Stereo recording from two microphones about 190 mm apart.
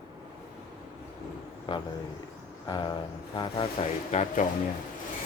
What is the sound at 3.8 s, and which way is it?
Speech, 35° left (ahead or behind).